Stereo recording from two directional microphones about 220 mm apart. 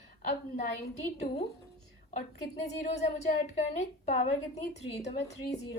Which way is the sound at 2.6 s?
30° left (ahead or behind).